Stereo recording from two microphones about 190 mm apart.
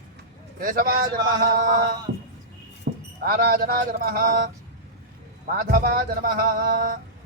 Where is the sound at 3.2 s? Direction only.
50° right (ahead or behind).